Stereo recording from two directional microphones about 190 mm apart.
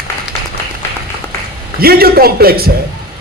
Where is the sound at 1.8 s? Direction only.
55° right (ahead or behind).